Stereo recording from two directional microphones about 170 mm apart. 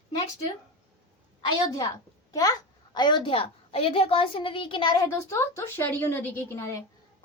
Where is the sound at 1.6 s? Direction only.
20° left (ahead or behind).